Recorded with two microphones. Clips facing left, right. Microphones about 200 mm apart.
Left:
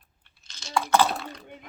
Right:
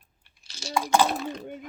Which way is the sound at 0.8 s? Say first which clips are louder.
Even; 15° right (ahead or behind).